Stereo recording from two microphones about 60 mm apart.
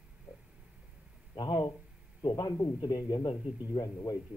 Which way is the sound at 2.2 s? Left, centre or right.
Left.